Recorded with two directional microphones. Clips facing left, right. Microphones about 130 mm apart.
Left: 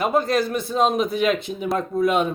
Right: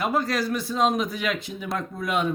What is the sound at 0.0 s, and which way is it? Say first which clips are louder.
Speech: left 4 dB; 20° left (ahead or behind).